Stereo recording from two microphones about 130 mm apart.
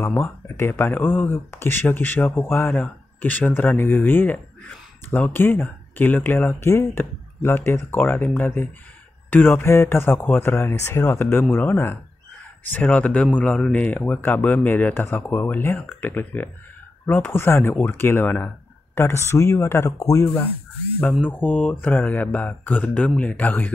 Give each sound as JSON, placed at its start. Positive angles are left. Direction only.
{"t": 0.0, "sound": "speech", "side_deg": 20}